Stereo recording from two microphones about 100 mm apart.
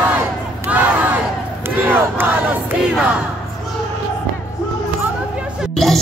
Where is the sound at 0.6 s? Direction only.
15° right (ahead or behind).